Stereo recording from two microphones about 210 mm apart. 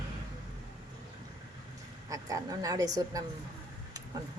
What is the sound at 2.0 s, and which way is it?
A woman's voice, 15° right (ahead or behind).